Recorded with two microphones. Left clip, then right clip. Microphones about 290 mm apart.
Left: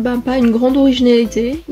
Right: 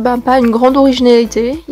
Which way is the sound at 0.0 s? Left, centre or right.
Right.